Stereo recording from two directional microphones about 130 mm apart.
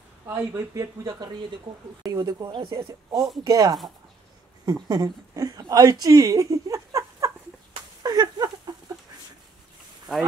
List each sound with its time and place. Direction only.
0.3 s speech: 20° right (ahead or behind)
4.8 s a woman's voice: 30° right (ahead or behind)
8.0 s a sound: 30° right (ahead or behind)